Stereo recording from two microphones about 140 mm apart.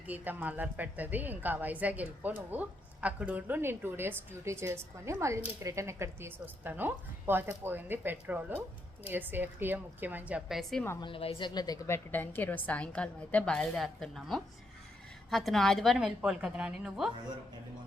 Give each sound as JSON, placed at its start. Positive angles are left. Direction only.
{"t": 0.1, "sound": "a woman's voice", "side_deg": -10}
{"t": 10.6, "sound": "a woman's voice", "side_deg": 0}
{"t": 11.0, "sound": "a woman's voice", "side_deg": 40}
{"t": 12.1, "sound": "a woman's voice", "side_deg": 15}